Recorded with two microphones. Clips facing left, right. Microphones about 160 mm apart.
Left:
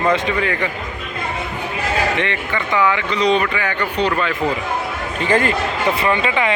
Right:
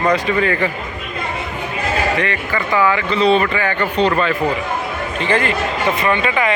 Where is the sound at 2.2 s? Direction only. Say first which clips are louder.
Right 1 dB; 25° left (ahead or behind).